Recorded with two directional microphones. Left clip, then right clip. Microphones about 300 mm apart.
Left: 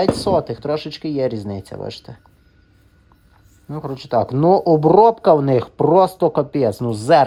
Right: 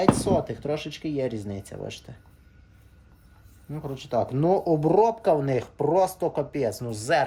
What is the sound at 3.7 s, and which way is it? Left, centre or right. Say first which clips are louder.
Speech: left 8 dB; left.